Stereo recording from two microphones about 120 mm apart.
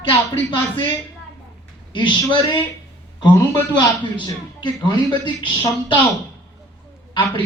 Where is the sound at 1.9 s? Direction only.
40° left (ahead or behind).